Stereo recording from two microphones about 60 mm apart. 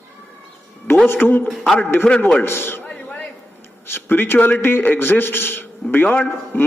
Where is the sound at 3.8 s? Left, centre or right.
Left.